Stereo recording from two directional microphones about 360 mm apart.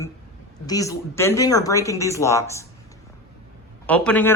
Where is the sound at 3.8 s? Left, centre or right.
Centre.